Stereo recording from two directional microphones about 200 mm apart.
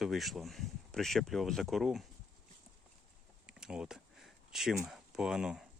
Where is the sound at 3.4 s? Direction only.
5° right (ahead or behind).